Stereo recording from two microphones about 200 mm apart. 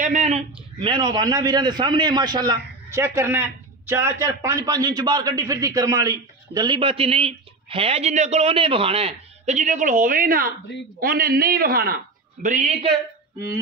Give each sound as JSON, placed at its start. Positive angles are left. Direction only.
{"t": 0.0, "sound": "a man's voice", "side_deg": -35}